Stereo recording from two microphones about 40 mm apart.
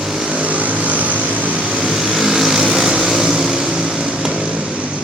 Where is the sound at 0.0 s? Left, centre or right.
Centre.